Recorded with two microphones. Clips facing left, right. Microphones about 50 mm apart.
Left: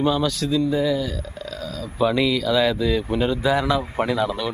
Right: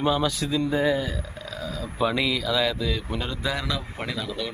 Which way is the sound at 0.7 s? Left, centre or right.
Right.